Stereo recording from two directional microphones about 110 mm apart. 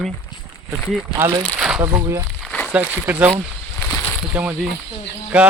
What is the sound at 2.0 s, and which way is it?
Speech, 30° right (ahead or behind).